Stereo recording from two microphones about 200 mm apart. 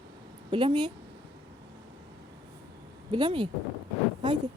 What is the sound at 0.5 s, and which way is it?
Speech, 25° right (ahead or behind).